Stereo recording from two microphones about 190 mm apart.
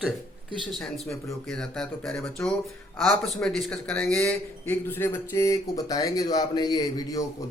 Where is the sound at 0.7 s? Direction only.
Centre (ahead or behind).